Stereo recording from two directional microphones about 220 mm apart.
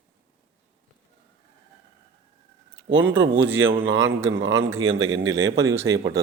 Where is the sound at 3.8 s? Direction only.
60° right (ahead or behind).